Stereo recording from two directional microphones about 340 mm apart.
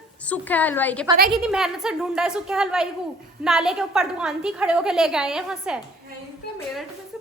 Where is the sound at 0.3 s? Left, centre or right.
Centre.